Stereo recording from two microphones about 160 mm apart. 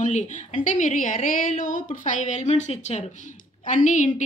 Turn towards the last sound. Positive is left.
turn(degrees=50)  # may be behind; listen again after turning